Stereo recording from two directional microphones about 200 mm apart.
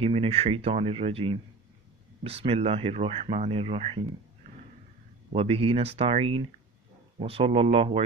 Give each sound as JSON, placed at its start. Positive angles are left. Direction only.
{"t": 0.0, "sound": "speech", "side_deg": -30}
{"t": 5.3, "sound": "speech", "side_deg": -30}